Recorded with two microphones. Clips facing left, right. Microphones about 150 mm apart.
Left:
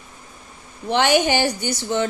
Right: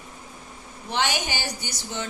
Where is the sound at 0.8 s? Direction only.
60° left (ahead or behind).